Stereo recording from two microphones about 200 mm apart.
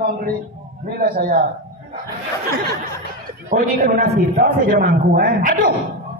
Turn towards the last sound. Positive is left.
turn(degrees=-40)  # may be behind; listen again after turning